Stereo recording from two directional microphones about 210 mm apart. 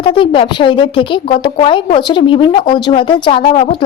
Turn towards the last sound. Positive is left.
turn(degrees=25)  # may be behind; listen again after turning